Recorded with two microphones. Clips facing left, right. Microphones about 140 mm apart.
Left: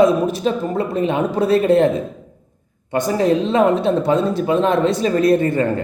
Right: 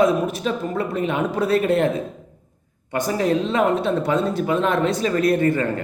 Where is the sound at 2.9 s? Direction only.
30° left (ahead or behind).